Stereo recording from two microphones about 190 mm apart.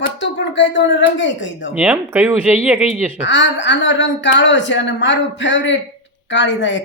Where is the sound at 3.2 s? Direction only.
75° left (ahead or behind).